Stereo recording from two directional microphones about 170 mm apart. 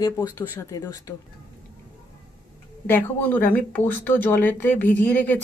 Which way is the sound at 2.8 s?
10° left (ahead or behind).